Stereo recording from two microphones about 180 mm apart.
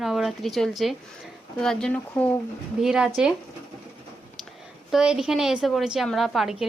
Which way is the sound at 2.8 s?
5° right (ahead or behind).